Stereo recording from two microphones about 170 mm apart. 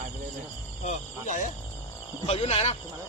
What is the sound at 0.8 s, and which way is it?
Speech, 45° left (ahead or behind).